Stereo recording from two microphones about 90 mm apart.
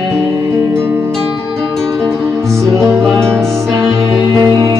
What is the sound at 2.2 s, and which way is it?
Music, 35° right (ahead or behind).